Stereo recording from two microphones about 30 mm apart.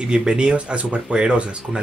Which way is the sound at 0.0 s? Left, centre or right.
Right.